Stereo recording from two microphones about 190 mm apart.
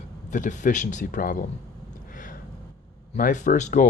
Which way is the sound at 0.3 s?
40° left (ahead or behind).